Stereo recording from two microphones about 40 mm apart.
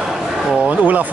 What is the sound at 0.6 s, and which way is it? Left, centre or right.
Speech, right.